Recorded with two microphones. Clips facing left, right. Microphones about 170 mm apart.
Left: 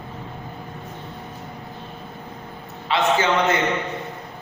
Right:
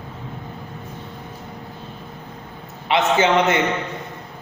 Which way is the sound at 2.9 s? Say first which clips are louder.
Right 2 dB; 20° right (ahead or behind).